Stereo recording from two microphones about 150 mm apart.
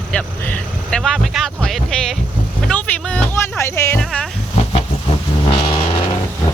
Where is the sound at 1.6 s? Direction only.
5° left (ahead or behind).